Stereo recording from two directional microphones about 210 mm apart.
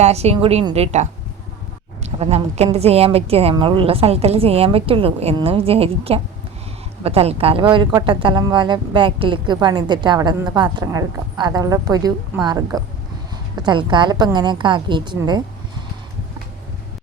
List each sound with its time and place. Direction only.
0.0 s a woman's voice: 30° right (ahead or behind)
2.0 s speech: 30° right (ahead or behind)